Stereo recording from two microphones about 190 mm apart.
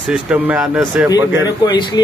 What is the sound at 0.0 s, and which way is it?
Speech, 5° right (ahead or behind).